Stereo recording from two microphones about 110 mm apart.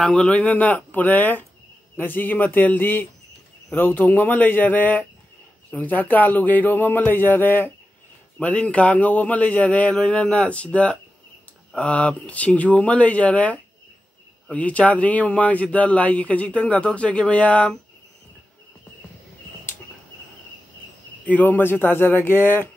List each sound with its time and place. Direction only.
0.0 s speech: 10° left (ahead or behind)
21.3 s speech: 15° left (ahead or behind)